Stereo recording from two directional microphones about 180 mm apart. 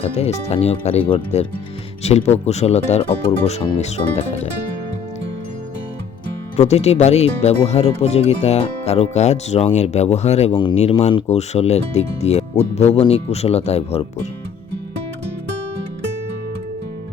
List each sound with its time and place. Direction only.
0.0 s speech: 35° left (ahead or behind)
6.6 s speech: 35° left (ahead or behind)